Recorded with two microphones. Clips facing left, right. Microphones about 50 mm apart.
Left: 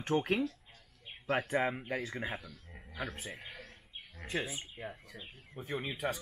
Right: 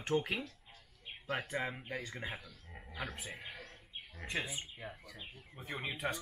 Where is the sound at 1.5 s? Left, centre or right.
Centre.